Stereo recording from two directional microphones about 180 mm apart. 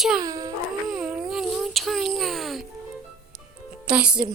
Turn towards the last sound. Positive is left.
turn(degrees=-5)  # may be behind; listen again after turning